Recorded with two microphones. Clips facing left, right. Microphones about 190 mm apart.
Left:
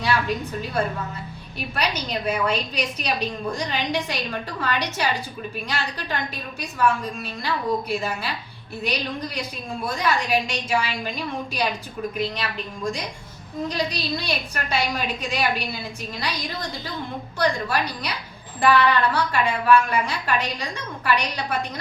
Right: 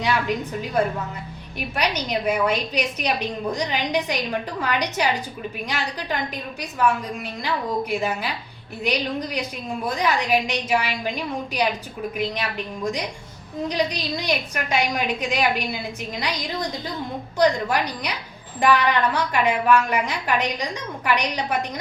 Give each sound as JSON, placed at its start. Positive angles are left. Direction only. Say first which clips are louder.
{"t": 0.0, "sound": "a woman's voice", "louder": "right 1 dB", "side_deg": -15}
{"t": 12.1, "sound": "a woman's voice", "louder": "right 3 dB", "side_deg": -15}
{"t": 17.3, "sound": "a woman's voice", "louder": "right 4 dB", "side_deg": -15}